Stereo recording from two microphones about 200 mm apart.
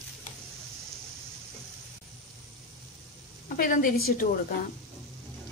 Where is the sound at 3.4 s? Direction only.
45° left (ahead or behind).